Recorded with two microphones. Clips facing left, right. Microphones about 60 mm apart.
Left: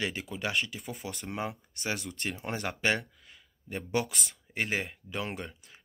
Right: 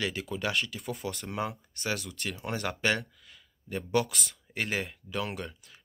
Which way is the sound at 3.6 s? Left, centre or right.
Centre.